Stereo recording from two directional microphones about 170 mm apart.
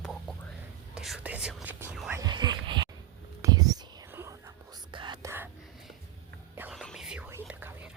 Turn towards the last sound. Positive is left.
turn(degrees=-10)  # may be behind; listen again after turning